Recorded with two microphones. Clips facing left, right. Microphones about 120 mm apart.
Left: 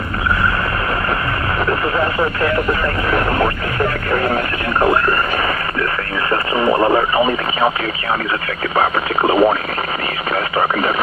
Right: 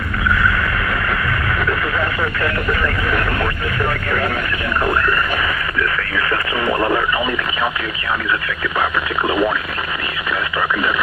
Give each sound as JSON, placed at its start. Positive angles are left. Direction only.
{"t": 1.7, "sound": "vehicle", "side_deg": 30}
{"t": 4.7, "sound": "radio", "side_deg": 35}
{"t": 6.3, "sound": "radio", "side_deg": 30}
{"t": 8.7, "sound": "speech", "side_deg": 35}